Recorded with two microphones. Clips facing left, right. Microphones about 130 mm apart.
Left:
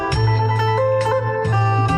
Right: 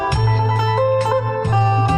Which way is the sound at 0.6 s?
25° right (ahead or behind).